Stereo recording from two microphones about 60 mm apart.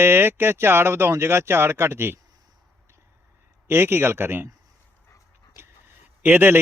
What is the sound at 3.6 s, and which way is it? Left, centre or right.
Speech, right.